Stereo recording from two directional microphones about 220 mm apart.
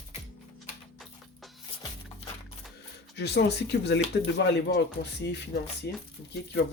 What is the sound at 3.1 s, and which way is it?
Speech, 50° left (ahead or behind).